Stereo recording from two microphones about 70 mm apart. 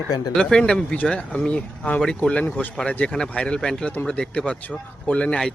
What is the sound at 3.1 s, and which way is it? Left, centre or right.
Speech, centre.